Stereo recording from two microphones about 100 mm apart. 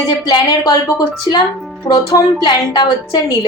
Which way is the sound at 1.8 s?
40° left (ahead or behind).